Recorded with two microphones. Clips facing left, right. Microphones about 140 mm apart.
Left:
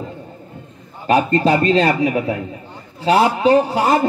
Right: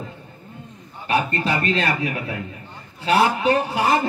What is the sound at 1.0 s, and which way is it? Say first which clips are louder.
A man's voice: left 7 dB; 40° left (ahead or behind).